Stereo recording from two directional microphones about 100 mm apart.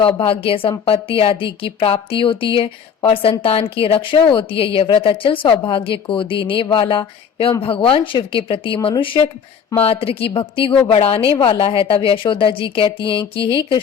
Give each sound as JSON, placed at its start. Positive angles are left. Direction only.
{"t": 0.0, "sound": "a woman's voice", "side_deg": 65}
{"t": 9.8, "sound": "a woman's voice", "side_deg": 70}
{"t": 10.8, "sound": "a woman's voice", "side_deg": 75}